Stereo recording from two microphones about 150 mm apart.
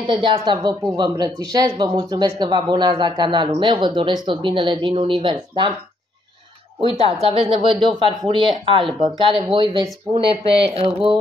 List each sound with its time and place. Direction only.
0.0 s speech: 35° right (ahead or behind)
6.8 s speech: 40° right (ahead or behind)